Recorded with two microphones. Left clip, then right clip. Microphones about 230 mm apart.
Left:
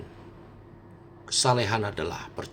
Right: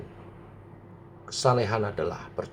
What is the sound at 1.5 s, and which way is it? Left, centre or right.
Speech, left.